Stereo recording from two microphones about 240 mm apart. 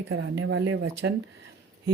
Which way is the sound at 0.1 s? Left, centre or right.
Right.